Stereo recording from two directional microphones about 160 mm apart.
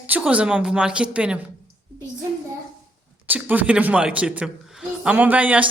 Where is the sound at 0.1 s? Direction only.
10° right (ahead or behind).